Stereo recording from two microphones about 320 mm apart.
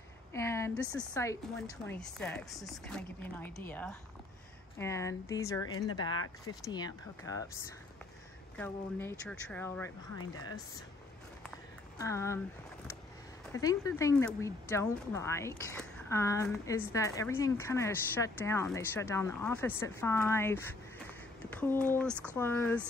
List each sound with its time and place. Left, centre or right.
0.3 s a sound: centre
0.9 s a woman's voice: centre
10.1 s speech: left
12.0 s speech: centre
13.5 s speech: centre
22.1 s speech: centre
22.4 s a woman's voice: centre